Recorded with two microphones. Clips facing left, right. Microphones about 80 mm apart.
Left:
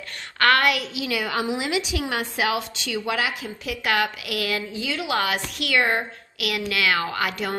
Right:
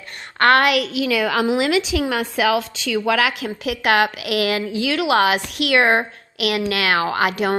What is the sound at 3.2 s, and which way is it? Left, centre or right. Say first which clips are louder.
A woman's voice: right 6 dB; right.